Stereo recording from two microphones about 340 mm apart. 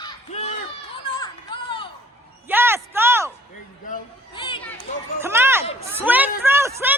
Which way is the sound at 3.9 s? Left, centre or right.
Centre.